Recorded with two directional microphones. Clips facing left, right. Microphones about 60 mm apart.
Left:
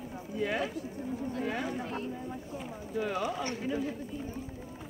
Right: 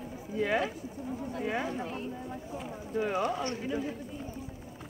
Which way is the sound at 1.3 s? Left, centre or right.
Centre.